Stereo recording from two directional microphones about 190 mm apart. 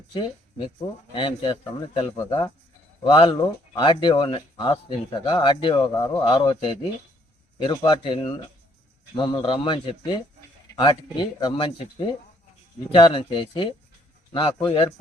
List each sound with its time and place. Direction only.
0.1 s speech: 25° left (ahead or behind)